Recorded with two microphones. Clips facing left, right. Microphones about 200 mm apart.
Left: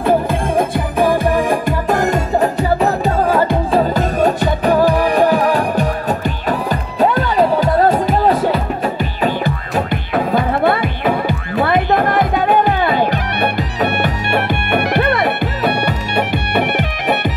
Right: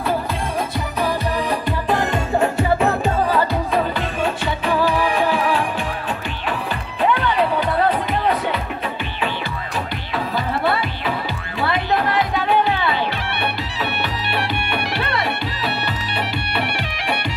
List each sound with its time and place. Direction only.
0.0 s music: 50° left (ahead or behind)
9.8 s music: 50° left (ahead or behind)